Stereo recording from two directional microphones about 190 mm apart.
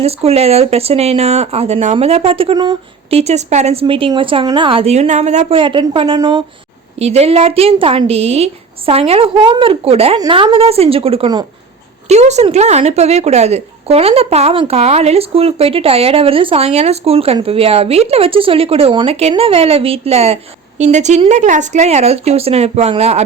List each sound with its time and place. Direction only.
0.0 s speech: 30° right (ahead or behind)
3.2 s a woman's voice: 35° right (ahead or behind)
7.0 s a woman's voice: 35° right (ahead or behind)